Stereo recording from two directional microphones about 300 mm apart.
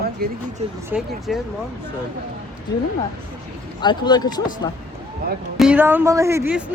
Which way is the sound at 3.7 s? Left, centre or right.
Centre.